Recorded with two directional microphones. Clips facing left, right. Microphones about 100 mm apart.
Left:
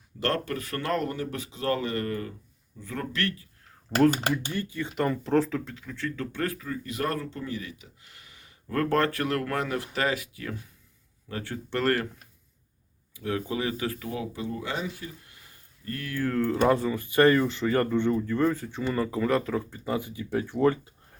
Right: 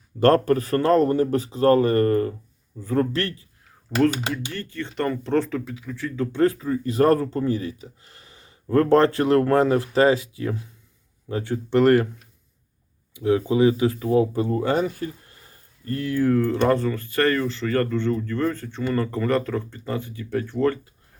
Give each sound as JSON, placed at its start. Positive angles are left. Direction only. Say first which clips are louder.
{"t": 0.2, "sound": "speech", "louder": "right 12 dB", "side_deg": -40}
{"t": 4.5, "sound": "speech", "louder": "right 1 dB", "side_deg": 10}
{"t": 6.3, "sound": "speech", "louder": "right 10 dB", "side_deg": -25}
{"t": 13.1, "sound": "speech", "louder": "right 10 dB", "side_deg": -20}
{"t": 14.1, "sound": "speech", "louder": "right 13 dB", "side_deg": -40}
{"t": 15.9, "sound": "speech", "louder": "right 8 dB", "side_deg": -25}
{"t": 16.2, "sound": "speech", "louder": "right 3 dB", "side_deg": -5}